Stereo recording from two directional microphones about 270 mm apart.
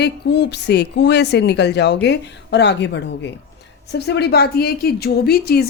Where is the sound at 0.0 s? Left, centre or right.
Left.